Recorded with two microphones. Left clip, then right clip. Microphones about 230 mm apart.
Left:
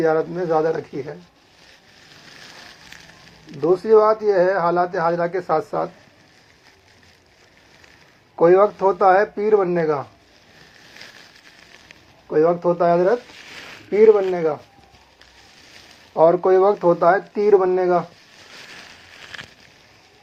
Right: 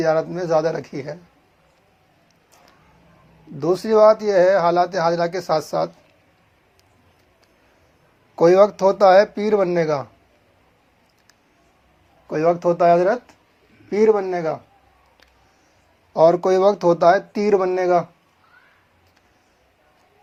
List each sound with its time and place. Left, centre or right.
0.0 s speech: right
3.6 s speech: right
8.4 s speech: right
12.3 s speech: right
16.1 s speech: right